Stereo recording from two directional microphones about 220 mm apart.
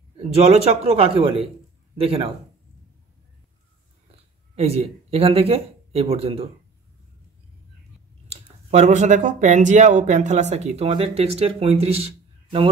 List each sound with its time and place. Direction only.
0.2 s speech: 30° right (ahead or behind)
4.6 s speech: 25° right (ahead or behind)
8.3 s speech: 30° right (ahead or behind)